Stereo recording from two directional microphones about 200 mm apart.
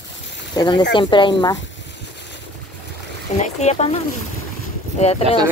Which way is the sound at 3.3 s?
30° left (ahead or behind).